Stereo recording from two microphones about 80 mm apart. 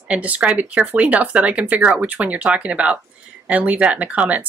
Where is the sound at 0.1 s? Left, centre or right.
Centre.